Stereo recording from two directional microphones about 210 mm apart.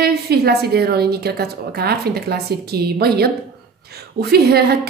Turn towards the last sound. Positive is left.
turn(degrees=-50)  # may be behind; listen again after turning